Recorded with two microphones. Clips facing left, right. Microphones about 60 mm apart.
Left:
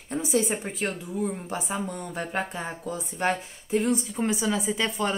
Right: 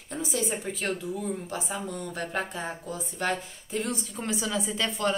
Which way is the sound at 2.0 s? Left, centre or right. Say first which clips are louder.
Left 1 dB; centre.